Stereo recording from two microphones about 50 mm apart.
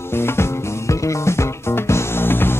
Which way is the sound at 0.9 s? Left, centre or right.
Left.